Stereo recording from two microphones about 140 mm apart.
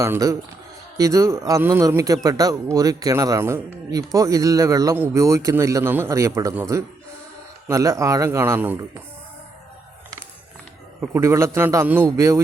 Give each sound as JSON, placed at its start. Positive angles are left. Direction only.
{"t": 0.0, "sound": "speech", "side_deg": -20}
{"t": 11.0, "sound": "speech", "side_deg": -15}